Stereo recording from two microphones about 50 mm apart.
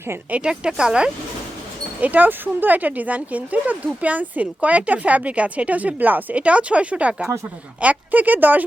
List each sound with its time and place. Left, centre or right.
0.4 s speech: centre
2.0 s speech: right
7.8 s speech: right